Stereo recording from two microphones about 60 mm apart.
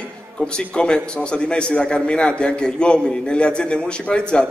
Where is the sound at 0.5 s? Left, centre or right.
Centre.